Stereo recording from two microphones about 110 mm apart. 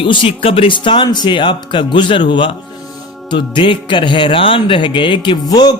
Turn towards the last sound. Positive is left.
turn(degrees=35)  # may be behind; listen again after turning